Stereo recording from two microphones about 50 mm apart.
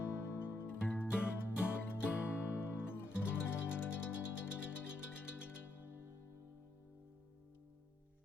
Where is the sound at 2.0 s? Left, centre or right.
Left.